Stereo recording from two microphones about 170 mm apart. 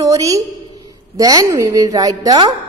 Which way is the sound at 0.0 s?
20° right (ahead or behind).